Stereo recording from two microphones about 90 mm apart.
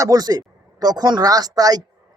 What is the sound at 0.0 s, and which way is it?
A man's voice, 45° right (ahead or behind).